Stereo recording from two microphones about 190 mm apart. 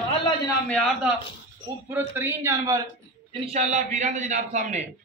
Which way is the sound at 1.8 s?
10° right (ahead or behind).